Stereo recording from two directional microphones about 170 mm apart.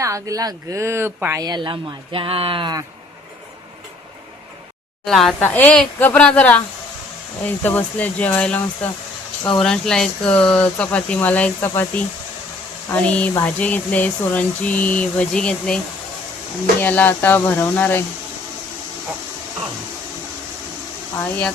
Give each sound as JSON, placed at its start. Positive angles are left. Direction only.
{"t": 0.0, "sound": "speech", "side_deg": -20}
{"t": 5.0, "sound": "speech", "side_deg": 0}
{"t": 16.8, "sound": "speech", "side_deg": 10}